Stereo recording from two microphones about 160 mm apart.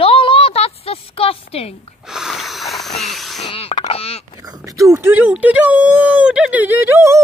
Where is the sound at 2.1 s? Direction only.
Centre (ahead or behind).